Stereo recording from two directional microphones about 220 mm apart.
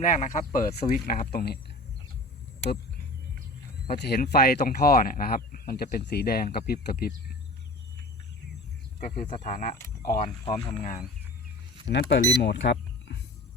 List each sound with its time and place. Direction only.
0.0 s speech: 35° left (ahead or behind)
3.8 s speech: 45° left (ahead or behind)
9.0 s speech: 35° left (ahead or behind)
10.5 s speech: 25° left (ahead or behind)
11.9 s speech: 50° left (ahead or behind)